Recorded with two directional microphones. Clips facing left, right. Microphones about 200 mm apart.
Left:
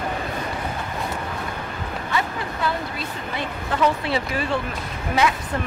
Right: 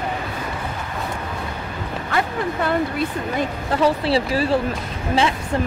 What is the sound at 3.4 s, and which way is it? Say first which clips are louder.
Speech: right 2 dB; 35° right (ahead or behind).